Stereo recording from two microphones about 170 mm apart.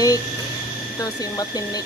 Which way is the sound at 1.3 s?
25° left (ahead or behind).